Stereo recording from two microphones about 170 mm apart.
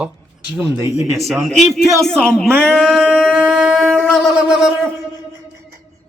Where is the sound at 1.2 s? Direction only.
Centre (ahead or behind).